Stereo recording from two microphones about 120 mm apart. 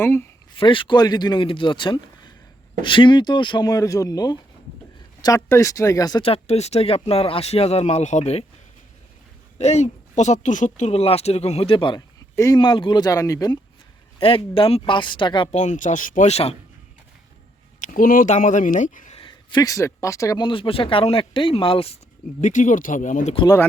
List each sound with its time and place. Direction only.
0.0 s speech: 20° left (ahead or behind)
0.5 s speech: 45° left (ahead or behind)
6.2 s speech: 60° left (ahead or behind)
9.6 s speech: 70° left (ahead or behind); by 13.6 s 30° left (ahead or behind)
14.2 s speech: 50° left (ahead or behind)
15.5 s speech: 90° left; by 16.6 s 60° left (ahead or behind)
17.7 s speech: 90° left
19.1 s speech: 45° left (ahead or behind); by 20.4 s 25° left (ahead or behind)
20.4 s speech: 45° left (ahead or behind)
22.4 s speech: 90° left